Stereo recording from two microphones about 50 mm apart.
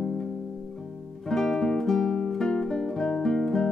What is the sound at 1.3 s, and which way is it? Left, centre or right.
Music, centre.